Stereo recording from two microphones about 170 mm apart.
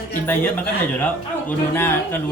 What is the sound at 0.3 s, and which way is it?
Speech, 10° left (ahead or behind).